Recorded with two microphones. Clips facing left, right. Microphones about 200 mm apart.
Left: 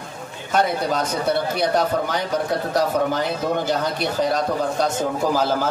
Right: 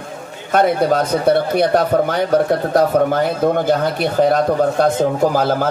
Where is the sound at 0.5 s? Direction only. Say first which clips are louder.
Right 6 dB; 55° right (ahead or behind).